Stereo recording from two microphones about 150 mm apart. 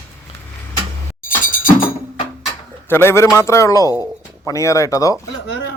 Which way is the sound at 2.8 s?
15° left (ahead or behind).